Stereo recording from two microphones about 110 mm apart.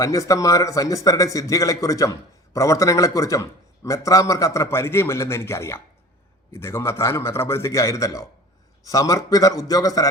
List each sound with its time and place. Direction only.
0.0 s a man's voice: 30° left (ahead or behind)